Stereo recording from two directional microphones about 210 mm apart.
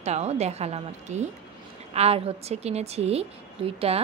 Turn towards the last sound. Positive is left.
turn(degrees=-30)  # may be behind; listen again after turning